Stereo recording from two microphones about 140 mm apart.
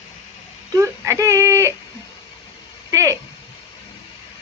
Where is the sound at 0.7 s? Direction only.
20° right (ahead or behind).